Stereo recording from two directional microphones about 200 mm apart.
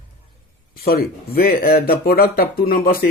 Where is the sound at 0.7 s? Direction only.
50° left (ahead or behind).